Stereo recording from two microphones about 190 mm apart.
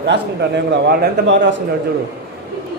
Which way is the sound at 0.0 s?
65° right (ahead or behind).